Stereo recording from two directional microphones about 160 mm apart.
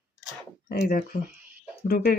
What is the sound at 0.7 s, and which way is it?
Speech, 65° left (ahead or behind).